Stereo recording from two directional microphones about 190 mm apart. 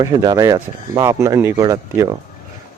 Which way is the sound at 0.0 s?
20° right (ahead or behind).